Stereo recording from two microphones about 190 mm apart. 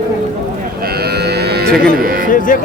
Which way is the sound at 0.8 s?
55° right (ahead or behind).